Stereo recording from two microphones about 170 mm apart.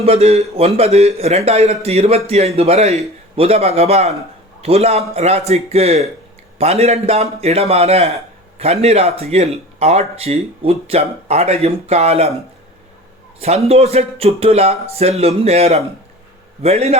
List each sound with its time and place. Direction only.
0.0 s a man's voice: 35° right (ahead or behind)
13.7 s a man's voice: 40° right (ahead or behind)